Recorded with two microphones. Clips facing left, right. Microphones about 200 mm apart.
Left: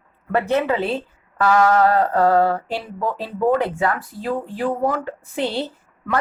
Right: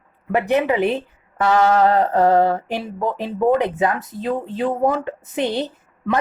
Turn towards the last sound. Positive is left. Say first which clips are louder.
# right 3 dB
turn(degrees=-20)  # may be behind; listen again after turning